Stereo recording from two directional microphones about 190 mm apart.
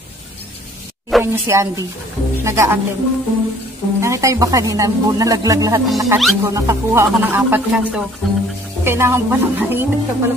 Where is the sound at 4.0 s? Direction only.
15° right (ahead or behind).